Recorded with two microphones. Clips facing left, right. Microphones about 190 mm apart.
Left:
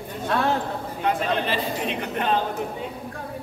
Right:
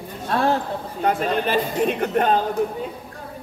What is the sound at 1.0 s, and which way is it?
Speech, 45° right (ahead or behind).